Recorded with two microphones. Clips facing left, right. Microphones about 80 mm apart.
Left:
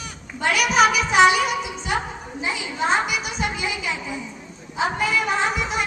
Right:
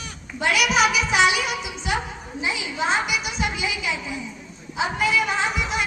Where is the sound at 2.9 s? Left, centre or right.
Left.